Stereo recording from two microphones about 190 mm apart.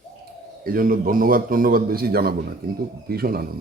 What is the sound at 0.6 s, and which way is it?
A man's voice, 50° right (ahead or behind).